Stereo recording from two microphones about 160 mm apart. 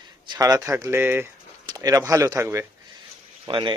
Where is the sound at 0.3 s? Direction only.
20° right (ahead or behind).